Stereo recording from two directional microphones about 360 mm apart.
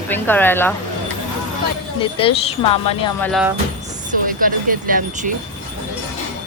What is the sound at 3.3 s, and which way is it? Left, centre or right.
Speech, centre.